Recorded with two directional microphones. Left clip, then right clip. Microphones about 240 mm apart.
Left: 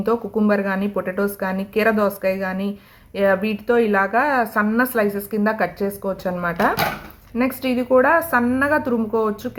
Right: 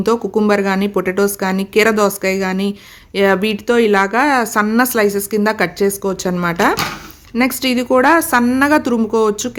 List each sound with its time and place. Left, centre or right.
0.0 s a woman's voice: right